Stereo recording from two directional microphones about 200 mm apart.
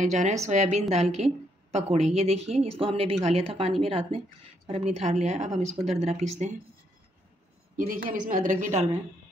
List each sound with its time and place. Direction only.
0.0 s a woman's voice: 35° right (ahead or behind)
7.7 s a woman's voice: 40° right (ahead or behind)